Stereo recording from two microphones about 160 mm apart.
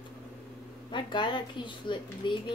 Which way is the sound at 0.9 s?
30° left (ahead or behind).